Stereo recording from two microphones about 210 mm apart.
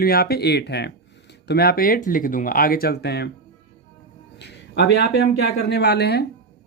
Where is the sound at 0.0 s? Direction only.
45° left (ahead or behind).